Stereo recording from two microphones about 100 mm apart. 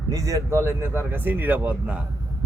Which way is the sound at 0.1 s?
35° right (ahead or behind).